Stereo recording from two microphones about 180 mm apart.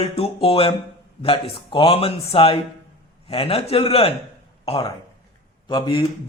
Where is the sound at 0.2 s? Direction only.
30° left (ahead or behind).